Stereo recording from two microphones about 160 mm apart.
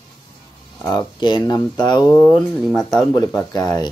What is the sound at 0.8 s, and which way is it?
Speech, 25° left (ahead or behind).